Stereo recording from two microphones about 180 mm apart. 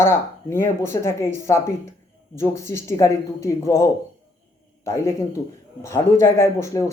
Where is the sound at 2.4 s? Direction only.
15° left (ahead or behind).